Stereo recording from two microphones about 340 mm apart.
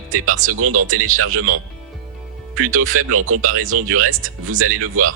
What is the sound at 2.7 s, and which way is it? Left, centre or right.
Speech, right.